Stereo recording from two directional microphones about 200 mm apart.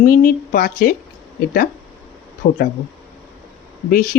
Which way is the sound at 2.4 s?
40° left (ahead or behind).